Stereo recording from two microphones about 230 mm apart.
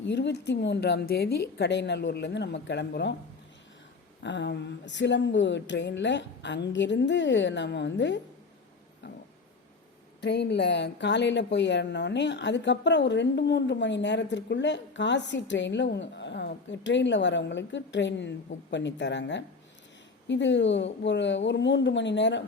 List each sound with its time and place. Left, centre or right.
0.0 s speech: left
4.2 s speech: left
10.2 s speech: left